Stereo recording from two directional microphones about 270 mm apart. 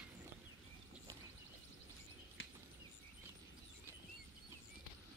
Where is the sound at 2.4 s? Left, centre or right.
Left.